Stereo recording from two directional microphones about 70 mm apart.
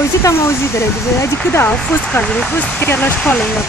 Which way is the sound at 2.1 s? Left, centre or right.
Centre.